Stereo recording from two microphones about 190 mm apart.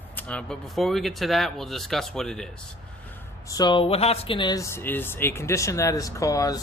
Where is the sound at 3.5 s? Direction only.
20° left (ahead or behind).